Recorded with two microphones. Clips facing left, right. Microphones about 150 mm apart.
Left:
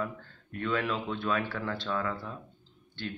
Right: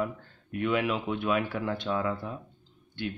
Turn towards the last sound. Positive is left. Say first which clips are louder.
# right 4 dB
turn(degrees=-15)  # may be behind; listen again after turning